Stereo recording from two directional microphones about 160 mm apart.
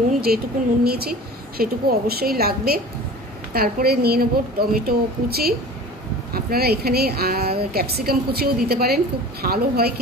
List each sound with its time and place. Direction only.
0.3 s a woman's voice: 70° right (ahead or behind)